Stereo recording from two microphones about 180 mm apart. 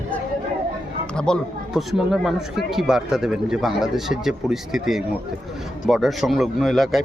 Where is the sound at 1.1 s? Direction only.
5° left (ahead or behind).